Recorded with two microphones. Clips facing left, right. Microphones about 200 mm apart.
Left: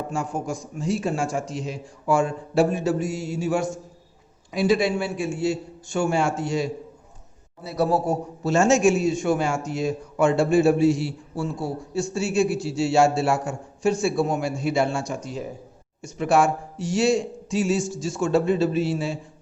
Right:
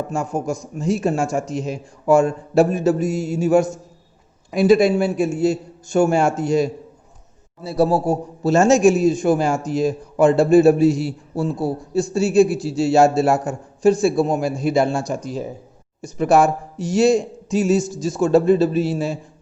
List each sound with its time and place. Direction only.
0.1 s a man's voice: 45° right (ahead or behind)
7.6 s a man's voice: 30° right (ahead or behind)